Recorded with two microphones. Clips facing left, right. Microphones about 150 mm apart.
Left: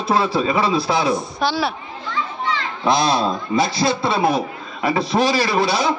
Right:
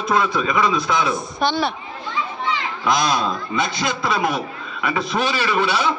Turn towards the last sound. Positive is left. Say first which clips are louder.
# left 1 dB
turn(degrees=35)  # may be behind; listen again after turning